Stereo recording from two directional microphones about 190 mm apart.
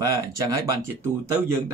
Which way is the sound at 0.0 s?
15° right (ahead or behind).